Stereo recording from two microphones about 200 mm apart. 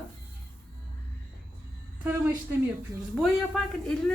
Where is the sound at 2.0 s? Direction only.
10° right (ahead or behind).